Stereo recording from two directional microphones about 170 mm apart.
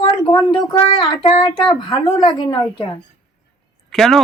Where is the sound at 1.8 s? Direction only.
25° left (ahead or behind).